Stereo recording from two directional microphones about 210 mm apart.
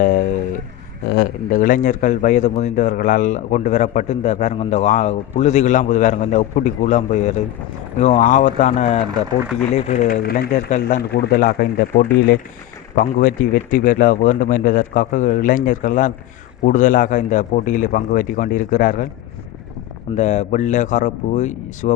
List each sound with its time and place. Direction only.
0.0 s a sound: 40° left (ahead or behind)
1.1 s a man's voice: 40° left (ahead or behind)
10.7 s a man's voice: 35° left (ahead or behind)
11.1 s speech: 50° left (ahead or behind)
13.0 s a man's voice: 40° left (ahead or behind)
20.1 s a man's voice: 35° left (ahead or behind)